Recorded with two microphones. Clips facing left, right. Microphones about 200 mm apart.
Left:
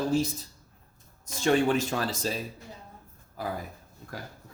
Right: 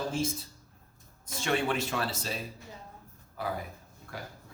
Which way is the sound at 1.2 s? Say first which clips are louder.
Left 6 dB; 45° left (ahead or behind).